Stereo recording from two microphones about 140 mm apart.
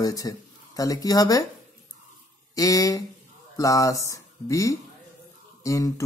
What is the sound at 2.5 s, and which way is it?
Speech, 25° left (ahead or behind).